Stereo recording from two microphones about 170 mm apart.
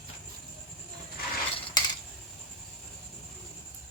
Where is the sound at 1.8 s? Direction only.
25° left (ahead or behind).